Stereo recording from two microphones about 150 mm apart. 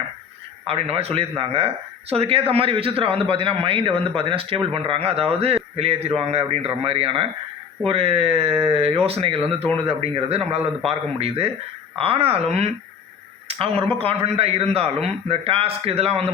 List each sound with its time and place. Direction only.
0.6 s a man's voice: 40° right (ahead or behind)